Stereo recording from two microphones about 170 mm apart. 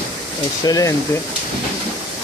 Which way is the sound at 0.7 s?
20° left (ahead or behind).